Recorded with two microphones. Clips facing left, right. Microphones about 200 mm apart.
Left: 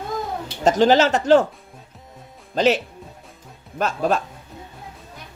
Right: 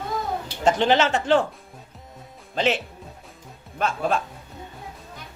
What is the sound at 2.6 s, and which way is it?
Speech, 40° left (ahead or behind).